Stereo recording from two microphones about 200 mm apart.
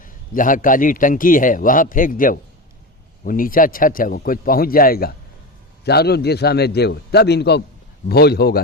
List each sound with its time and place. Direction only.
0.0 s a man's voice: 40° left (ahead or behind)